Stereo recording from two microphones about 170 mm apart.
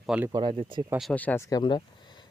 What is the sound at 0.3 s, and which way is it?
Speech, 25° right (ahead or behind).